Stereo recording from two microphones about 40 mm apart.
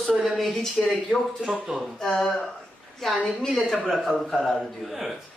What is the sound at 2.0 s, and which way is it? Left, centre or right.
Speech, centre.